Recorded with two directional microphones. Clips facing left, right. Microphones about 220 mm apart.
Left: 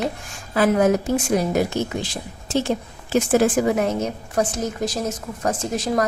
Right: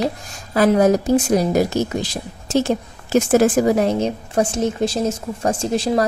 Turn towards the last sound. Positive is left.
turn(degrees=-30)  # may be behind; listen again after turning